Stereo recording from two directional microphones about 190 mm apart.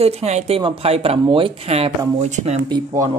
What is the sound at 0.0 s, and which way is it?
Speech, 35° right (ahead or behind).